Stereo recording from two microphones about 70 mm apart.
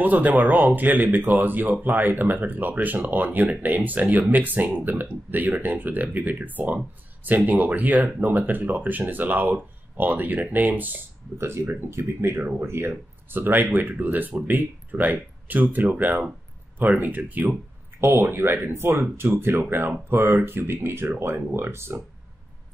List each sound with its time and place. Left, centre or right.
0.0 s speech: right
11.3 s speech: right